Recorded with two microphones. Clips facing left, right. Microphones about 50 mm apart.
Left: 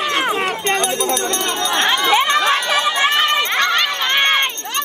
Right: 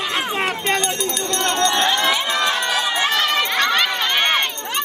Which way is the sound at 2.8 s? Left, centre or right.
Left.